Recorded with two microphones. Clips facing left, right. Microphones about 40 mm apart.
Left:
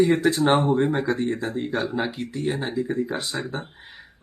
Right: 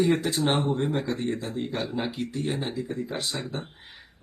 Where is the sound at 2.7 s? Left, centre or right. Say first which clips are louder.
Left 6 dB; centre.